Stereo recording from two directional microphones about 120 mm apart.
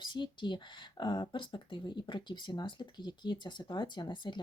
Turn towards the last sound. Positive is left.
turn(degrees=40)  # may be behind; listen again after turning